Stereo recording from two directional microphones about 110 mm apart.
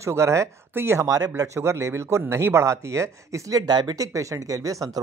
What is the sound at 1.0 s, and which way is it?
Speech, 35° right (ahead or behind).